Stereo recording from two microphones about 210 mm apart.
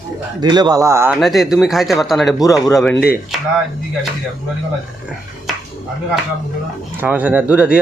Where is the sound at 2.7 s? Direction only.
5° left (ahead or behind).